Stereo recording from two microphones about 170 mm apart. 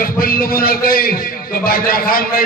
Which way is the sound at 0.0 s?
60° left (ahead or behind).